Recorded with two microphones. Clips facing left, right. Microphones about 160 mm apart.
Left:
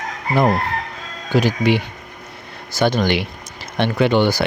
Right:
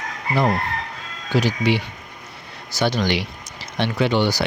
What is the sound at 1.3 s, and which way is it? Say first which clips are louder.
Speech: left 3 dB; 50° left (ahead or behind).